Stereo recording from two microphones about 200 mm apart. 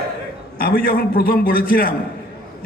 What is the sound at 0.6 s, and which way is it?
A man's voice, 45° left (ahead or behind).